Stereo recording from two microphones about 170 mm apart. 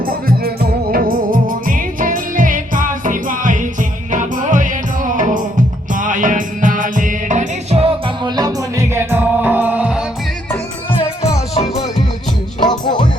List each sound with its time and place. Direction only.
0.0 s music: 60° right (ahead or behind); by 10.0 s 10° right (ahead or behind)
12.6 s music: 25° left (ahead or behind)